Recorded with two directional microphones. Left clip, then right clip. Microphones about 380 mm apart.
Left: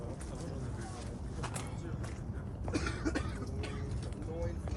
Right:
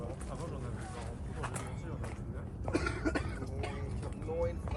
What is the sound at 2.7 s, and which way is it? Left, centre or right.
Cough, centre.